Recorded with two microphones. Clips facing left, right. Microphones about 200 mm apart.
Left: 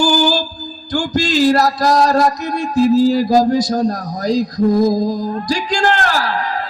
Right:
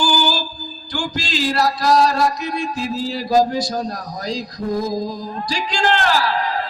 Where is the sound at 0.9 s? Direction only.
45° left (ahead or behind).